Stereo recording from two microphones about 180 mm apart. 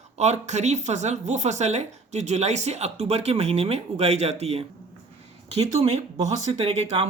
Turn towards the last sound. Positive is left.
turn(degrees=-35)  # may be behind; listen again after turning